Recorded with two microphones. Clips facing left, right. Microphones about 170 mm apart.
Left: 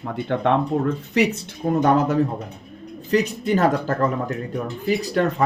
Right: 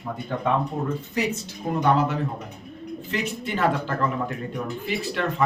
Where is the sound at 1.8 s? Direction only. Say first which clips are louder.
Left 4 dB; 40° left (ahead or behind).